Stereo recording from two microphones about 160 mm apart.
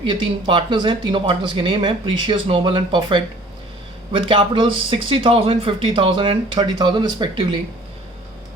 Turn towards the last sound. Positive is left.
turn(degrees=-30)  # may be behind; listen again after turning